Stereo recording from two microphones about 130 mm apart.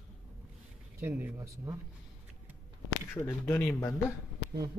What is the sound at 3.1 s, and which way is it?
Speech, 20° left (ahead or behind).